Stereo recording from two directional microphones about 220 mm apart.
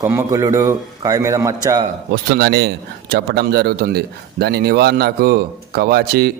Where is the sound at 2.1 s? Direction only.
45° right (ahead or behind).